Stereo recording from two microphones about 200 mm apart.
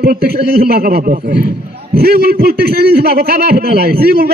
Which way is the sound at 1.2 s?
55° right (ahead or behind).